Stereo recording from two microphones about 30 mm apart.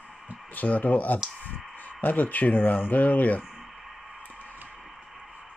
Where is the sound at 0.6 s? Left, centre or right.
Left.